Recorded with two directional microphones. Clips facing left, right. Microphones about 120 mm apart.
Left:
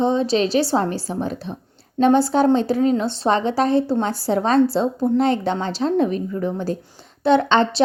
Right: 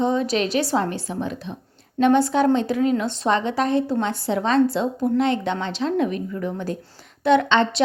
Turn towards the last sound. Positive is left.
turn(degrees=35)  # may be behind; listen again after turning